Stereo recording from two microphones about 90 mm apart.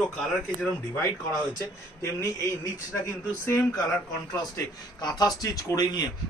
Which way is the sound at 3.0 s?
35° left (ahead or behind).